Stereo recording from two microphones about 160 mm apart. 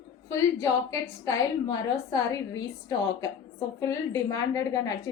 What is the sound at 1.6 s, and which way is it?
A woman's voice, 25° left (ahead or behind).